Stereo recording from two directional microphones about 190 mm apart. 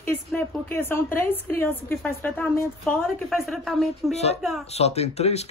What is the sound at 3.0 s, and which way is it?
Speech, centre (ahead or behind).